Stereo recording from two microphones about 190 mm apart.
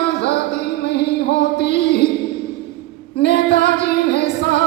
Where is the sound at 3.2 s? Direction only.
60° left (ahead or behind).